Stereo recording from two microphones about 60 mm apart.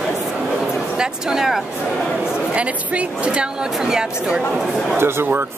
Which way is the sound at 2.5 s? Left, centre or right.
Right.